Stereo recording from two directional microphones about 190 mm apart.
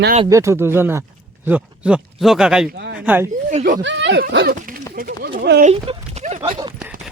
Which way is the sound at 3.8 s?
70° right (ahead or behind).